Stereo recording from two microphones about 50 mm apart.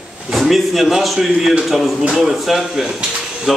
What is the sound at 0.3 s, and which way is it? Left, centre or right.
Speech, centre.